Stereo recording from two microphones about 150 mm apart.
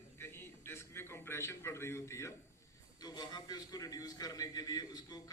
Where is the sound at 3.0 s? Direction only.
30° left (ahead or behind).